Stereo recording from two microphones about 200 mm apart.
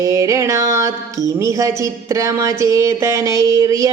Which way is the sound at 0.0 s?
15° right (ahead or behind).